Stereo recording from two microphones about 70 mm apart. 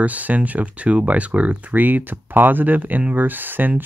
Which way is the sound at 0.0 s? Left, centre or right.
Right.